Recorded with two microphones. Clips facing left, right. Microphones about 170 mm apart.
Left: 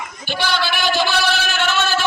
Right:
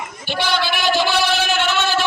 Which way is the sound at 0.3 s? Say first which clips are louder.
Right 1 dB; 20° right (ahead or behind).